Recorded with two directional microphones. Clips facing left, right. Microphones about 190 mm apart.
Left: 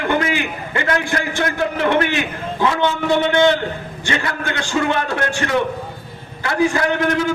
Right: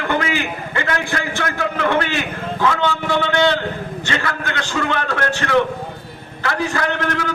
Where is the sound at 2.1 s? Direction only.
20° left (ahead or behind).